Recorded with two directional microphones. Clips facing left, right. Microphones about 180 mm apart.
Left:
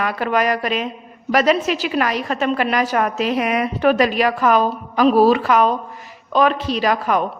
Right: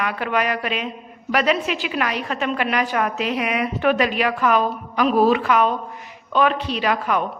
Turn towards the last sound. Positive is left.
turn(degrees=40)  # may be behind; listen again after turning